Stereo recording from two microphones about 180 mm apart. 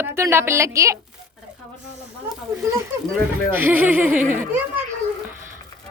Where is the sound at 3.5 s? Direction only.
10° right (ahead or behind).